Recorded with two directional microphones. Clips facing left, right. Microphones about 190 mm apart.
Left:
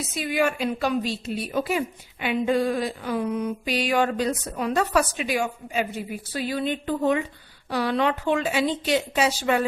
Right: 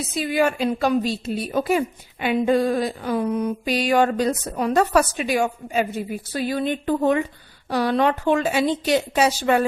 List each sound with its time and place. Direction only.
0.1 s mantra: 35° right (ahead or behind)
7.7 s speech: 40° right (ahead or behind)